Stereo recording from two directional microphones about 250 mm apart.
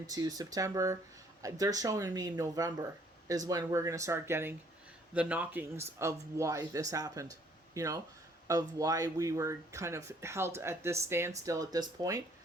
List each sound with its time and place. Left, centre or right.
0.1 s speech: centre